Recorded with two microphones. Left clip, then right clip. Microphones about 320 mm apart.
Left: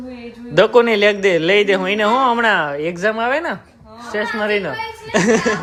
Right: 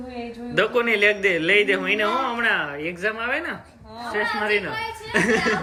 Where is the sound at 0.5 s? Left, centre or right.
Centre.